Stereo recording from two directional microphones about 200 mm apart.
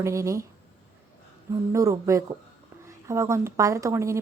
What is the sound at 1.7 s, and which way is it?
A woman's voice, 15° right (ahead or behind).